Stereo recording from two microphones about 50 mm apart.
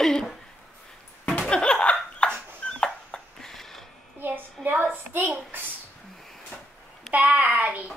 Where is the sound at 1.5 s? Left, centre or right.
Centre.